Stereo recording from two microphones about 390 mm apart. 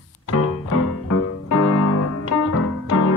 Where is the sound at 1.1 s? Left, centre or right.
Left.